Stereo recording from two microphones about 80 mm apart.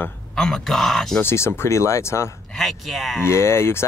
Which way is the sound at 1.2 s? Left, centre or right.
Left.